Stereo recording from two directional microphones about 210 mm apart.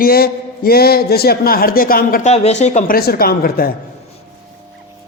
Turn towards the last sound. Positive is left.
turn(degrees=45)  # may be behind; listen again after turning